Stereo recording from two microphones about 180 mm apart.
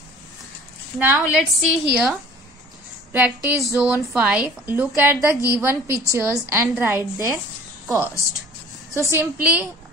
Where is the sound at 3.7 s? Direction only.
10° right (ahead or behind).